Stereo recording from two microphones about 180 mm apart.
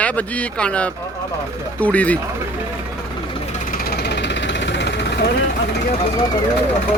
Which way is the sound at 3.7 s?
60° left (ahead or behind).